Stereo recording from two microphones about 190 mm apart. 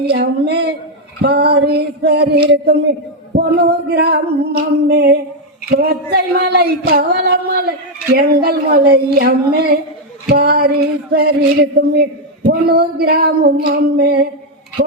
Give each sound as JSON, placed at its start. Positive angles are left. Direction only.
{"t": 0.0, "sound": "singing", "side_deg": -60}